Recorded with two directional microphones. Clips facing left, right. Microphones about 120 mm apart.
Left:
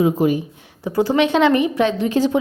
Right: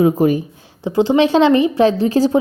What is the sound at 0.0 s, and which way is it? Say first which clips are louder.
Speech: right 3 dB; 45° right (ahead or behind).